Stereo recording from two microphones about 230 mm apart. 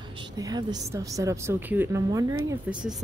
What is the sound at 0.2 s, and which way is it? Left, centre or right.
A woman's voice, centre.